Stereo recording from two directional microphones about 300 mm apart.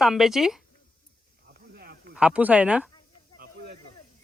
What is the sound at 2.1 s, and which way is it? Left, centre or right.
Speech, centre.